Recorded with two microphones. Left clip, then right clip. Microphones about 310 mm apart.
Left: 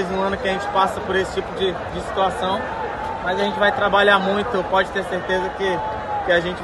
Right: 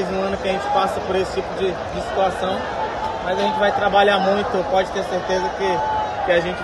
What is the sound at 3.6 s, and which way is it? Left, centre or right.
Speech, centre.